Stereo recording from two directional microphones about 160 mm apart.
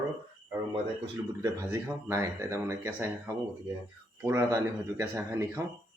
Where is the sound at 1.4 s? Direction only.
15° right (ahead or behind).